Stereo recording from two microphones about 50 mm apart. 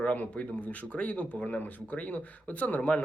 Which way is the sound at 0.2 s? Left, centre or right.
Left.